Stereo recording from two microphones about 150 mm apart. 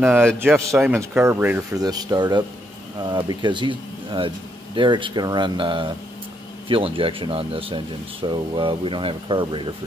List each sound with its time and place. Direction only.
0.4 s speech: 15° right (ahead or behind); by 9.7 s 35° right (ahead or behind)